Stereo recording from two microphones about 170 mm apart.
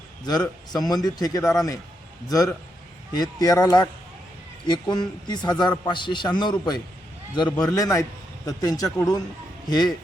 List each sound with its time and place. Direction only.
0.3 s a man's voice: 25° left (ahead or behind)